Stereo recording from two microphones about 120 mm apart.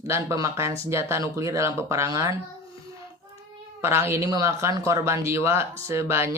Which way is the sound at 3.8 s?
20° right (ahead or behind).